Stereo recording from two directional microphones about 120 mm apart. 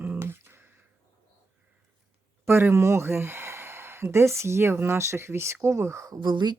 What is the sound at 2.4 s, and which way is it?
Speech, 20° right (ahead or behind).